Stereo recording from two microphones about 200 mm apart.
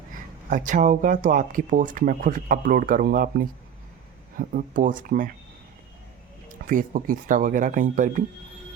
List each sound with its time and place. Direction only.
0.5 s speech: 40° right (ahead or behind)
6.7 s speech: 40° right (ahead or behind)